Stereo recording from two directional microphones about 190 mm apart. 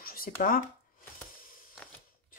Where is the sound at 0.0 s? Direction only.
50° left (ahead or behind).